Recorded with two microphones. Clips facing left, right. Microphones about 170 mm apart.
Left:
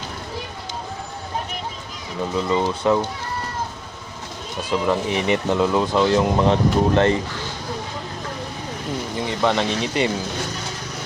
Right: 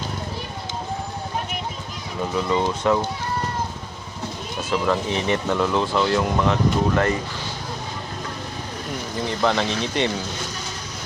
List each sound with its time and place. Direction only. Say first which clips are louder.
2.3 s speech: left 1 dB; 20° left (ahead or behind)
4.7 s speech: left 1 dB; 15° left (ahead or behind)
9.4 s speech: left 1 dB; centre (ahead or behind)